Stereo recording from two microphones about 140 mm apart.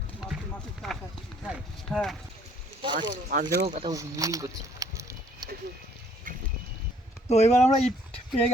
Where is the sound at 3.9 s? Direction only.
25° right (ahead or behind).